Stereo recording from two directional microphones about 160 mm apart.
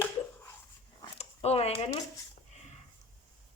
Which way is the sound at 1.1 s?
40° left (ahead or behind).